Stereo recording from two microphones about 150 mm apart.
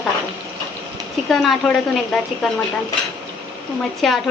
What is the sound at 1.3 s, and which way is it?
Speech, 5° left (ahead or behind).